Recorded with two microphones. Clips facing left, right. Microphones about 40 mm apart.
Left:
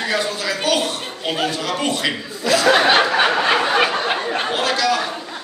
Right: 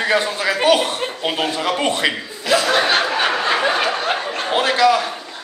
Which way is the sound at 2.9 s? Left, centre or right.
Left.